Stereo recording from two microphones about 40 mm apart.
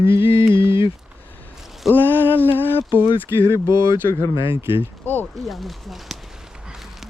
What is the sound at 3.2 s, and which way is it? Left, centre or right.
Speech, right.